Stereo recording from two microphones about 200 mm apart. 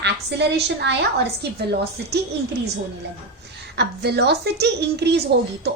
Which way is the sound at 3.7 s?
55° right (ahead or behind).